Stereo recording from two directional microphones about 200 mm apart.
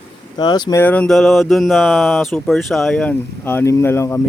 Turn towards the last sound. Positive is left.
turn(degrees=15)  # may be behind; listen again after turning